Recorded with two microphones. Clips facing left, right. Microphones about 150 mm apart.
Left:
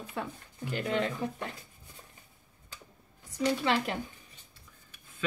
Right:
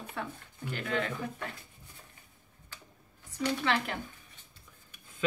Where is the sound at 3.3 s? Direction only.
20° left (ahead or behind).